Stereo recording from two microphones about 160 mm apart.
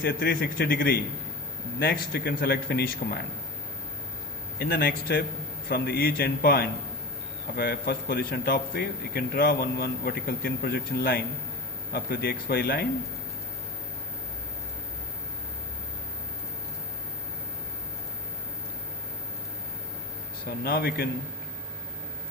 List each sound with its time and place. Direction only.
0.0 s a man's voice: 70° left (ahead or behind)
4.6 s a man's voice: 75° left (ahead or behind)
20.7 s a man's voice: 70° left (ahead or behind)